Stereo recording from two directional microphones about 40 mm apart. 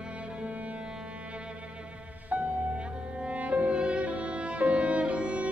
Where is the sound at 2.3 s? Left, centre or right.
Right.